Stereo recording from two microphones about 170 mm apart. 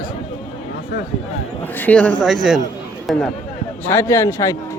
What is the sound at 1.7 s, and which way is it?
Speech, 10° left (ahead or behind).